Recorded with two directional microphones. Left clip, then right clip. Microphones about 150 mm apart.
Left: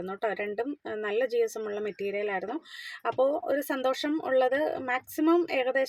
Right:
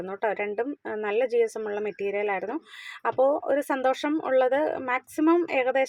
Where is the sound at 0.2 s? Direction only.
15° right (ahead or behind).